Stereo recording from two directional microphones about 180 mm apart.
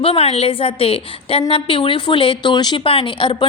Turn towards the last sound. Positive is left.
turn(degrees=25)  # may be behind; listen again after turning